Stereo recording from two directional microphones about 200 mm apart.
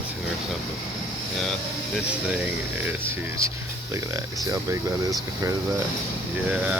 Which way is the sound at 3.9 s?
15° right (ahead or behind).